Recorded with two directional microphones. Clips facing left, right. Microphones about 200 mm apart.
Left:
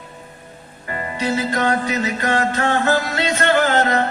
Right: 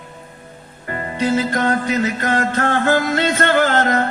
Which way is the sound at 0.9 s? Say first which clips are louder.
Right 3 dB; 50° right (ahead or behind).